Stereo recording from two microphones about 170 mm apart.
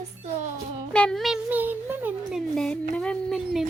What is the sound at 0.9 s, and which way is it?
Speech, 5° left (ahead or behind).